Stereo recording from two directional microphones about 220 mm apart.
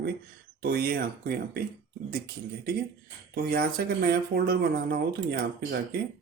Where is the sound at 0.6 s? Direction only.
45° right (ahead or behind).